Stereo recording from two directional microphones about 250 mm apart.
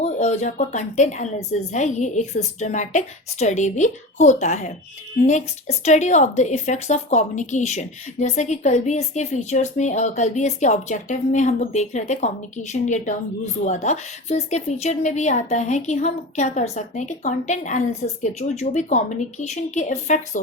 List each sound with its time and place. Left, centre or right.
0.0 s a woman's voice: left